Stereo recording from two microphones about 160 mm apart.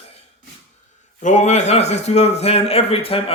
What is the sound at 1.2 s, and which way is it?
A man's voice, 50° left (ahead or behind).